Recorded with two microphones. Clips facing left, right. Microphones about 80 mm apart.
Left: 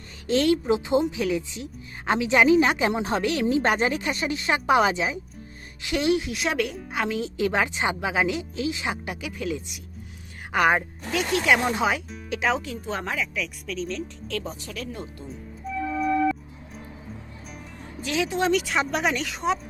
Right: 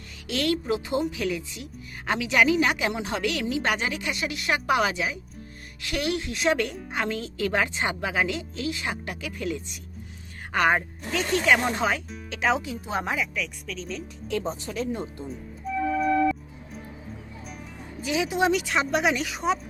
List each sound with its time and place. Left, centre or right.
0.3 s a woman's voice: left
6.3 s speech: centre
7.2 s a woman's voice: centre
9.4 s speech: centre
13.3 s speech: centre
14.3 s speech: right
18.0 s speech: centre
18.6 s speech: centre